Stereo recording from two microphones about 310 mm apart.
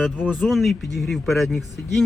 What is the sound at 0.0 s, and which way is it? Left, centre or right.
Speech, centre.